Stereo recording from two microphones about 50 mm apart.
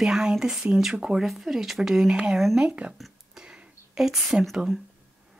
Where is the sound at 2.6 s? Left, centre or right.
Right.